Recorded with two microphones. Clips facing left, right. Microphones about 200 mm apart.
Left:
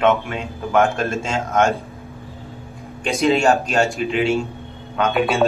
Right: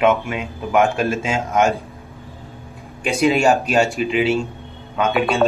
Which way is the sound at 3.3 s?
10° right (ahead or behind).